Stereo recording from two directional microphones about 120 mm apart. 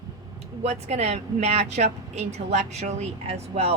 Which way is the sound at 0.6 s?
65° right (ahead or behind).